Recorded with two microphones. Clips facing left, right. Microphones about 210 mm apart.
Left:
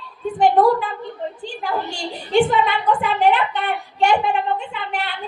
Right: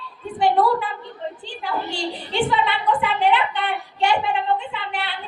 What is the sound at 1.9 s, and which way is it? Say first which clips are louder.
A woman's voice: left 4 dB; 45° left (ahead or behind).